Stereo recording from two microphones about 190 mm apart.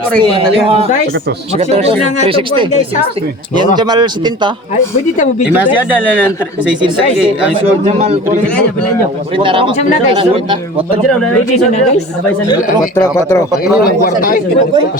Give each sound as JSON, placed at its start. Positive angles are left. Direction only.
{"t": 0.2, "sound": "a man's voice", "side_deg": -30}
{"t": 3.8, "sound": "speech", "side_deg": -20}
{"t": 5.5, "sound": "speech", "side_deg": -10}
{"t": 7.9, "sound": "a man's voice", "side_deg": -40}
{"t": 9.4, "sound": "speech", "side_deg": -25}
{"t": 11.5, "sound": "a woman's voice", "side_deg": 35}
{"t": 13.0, "sound": "speech", "side_deg": 15}
{"t": 13.7, "sound": "speech", "side_deg": 50}